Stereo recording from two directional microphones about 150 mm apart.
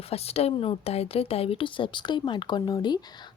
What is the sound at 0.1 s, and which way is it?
A woman's voice, 45° left (ahead or behind).